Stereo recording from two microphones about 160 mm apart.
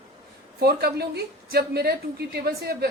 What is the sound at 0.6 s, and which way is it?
A woman's voice, 75° right (ahead or behind).